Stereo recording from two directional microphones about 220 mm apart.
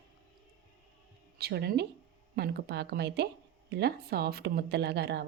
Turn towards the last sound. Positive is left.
turn(degrees=-50)  # may be behind; listen again after turning